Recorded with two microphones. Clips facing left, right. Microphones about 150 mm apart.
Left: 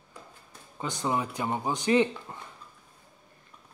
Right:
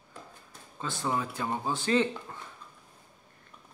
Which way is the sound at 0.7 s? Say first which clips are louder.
Left 2 dB; 15° left (ahead or behind).